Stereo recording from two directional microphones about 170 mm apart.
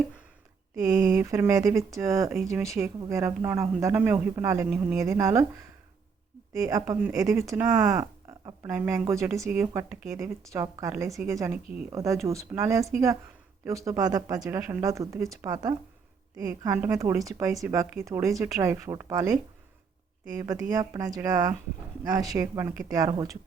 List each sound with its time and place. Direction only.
1.0 s speech: 20° right (ahead or behind)
6.5 s speech: 20° right (ahead or behind)
8.0 s a sound: 25° right (ahead or behind)
8.6 s speech: 15° right (ahead or behind)